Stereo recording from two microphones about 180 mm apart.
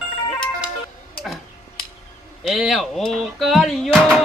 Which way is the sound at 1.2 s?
Centre (ahead or behind).